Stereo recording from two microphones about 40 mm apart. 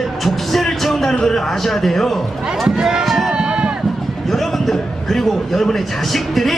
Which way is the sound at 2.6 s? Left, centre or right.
Centre.